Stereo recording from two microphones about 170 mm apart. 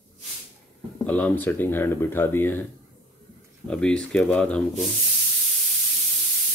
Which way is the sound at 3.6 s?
5° left (ahead or behind).